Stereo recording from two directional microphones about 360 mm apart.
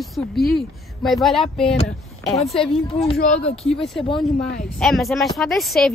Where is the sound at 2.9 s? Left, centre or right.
Centre.